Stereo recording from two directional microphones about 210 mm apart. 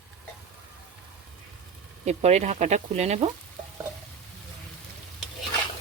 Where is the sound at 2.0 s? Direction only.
30° right (ahead or behind).